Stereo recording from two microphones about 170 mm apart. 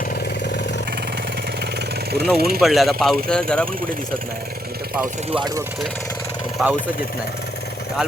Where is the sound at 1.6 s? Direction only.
70° right (ahead or behind).